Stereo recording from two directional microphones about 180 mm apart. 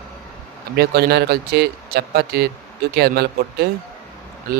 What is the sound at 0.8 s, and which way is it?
Speech, 60° right (ahead or behind).